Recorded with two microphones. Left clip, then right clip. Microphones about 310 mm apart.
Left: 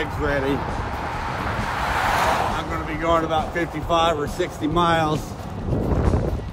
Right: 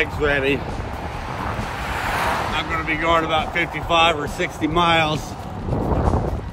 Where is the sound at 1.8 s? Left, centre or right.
Left.